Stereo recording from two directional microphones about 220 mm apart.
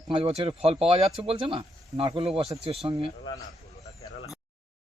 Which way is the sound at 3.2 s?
15° left (ahead or behind).